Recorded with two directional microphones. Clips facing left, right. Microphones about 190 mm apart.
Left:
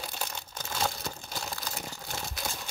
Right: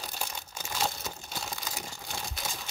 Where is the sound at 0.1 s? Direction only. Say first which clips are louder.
Left 1 dB; 10° right (ahead or behind).